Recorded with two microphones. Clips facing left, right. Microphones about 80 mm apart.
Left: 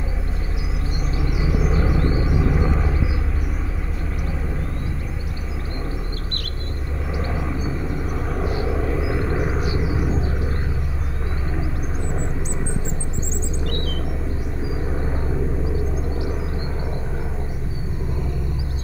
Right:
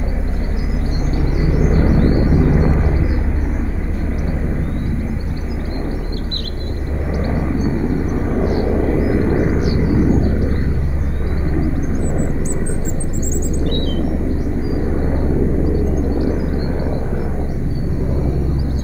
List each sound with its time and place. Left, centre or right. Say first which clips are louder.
1.2 s vehicle: right 5 dB; right
8.3 s vehicle: right 7 dB; right
9.8 s a sound: right 9 dB; right
15.6 s vehicle: right 8 dB; right